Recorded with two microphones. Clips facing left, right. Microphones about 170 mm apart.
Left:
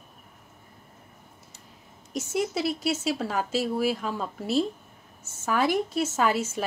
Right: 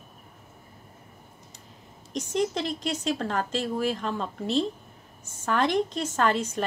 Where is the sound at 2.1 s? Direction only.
5° left (ahead or behind).